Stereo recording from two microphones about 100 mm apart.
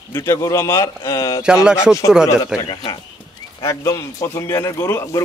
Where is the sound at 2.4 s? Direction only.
50° left (ahead or behind).